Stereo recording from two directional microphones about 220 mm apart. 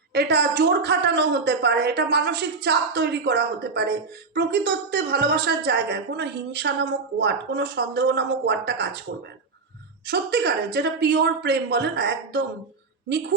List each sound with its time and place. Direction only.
0.1 s a woman's voice: 50° right (ahead or behind)
10.1 s a woman's voice: 50° right (ahead or behind)